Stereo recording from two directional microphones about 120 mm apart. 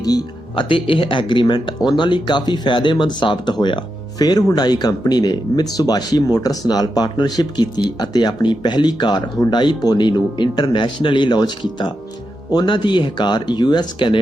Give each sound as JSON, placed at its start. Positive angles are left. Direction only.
{"t": 0.0, "sound": "speech", "side_deg": 30}